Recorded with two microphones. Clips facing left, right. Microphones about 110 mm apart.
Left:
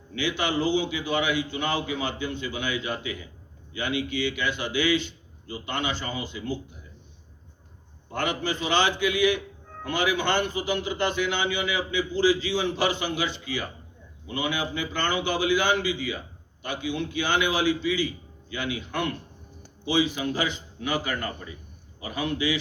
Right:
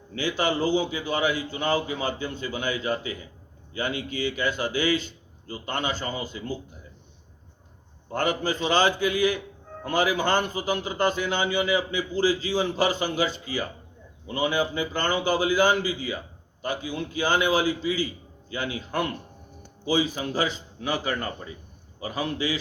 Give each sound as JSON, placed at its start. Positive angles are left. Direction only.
{"t": 0.2, "sound": "a man's voice", "side_deg": -40}
{"t": 8.1, "sound": "a man's voice", "side_deg": -40}